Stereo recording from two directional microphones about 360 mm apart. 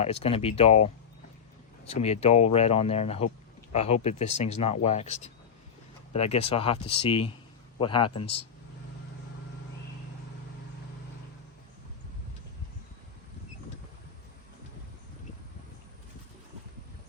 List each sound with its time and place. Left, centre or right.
0.0 s speech: centre
1.9 s speech: centre